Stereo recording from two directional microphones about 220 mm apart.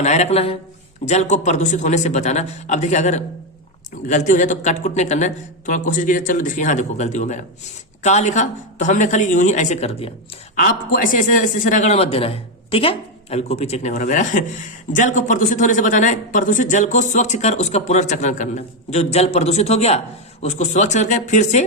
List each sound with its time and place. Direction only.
0.0 s speech: 30° left (ahead or behind)